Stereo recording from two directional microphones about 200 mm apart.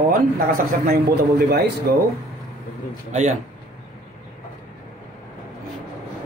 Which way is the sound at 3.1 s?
35° right (ahead or behind).